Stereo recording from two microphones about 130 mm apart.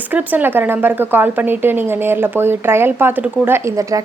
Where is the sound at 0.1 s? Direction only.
15° right (ahead or behind).